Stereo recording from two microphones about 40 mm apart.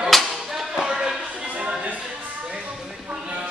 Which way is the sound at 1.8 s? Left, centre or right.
Right.